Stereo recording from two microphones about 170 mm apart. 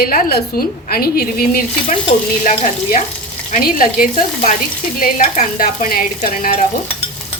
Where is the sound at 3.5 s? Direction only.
55° left (ahead or behind).